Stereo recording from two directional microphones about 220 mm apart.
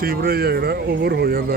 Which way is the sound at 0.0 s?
45° right (ahead or behind).